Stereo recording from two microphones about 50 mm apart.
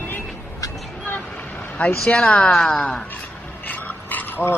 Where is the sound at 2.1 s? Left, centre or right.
Left.